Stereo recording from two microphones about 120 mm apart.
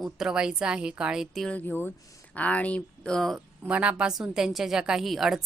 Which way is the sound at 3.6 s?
10° right (ahead or behind).